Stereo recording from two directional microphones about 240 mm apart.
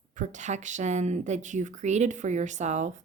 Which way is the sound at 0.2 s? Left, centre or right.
Right.